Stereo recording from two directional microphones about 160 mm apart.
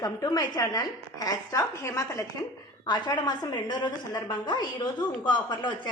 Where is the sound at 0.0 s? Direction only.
20° left (ahead or behind).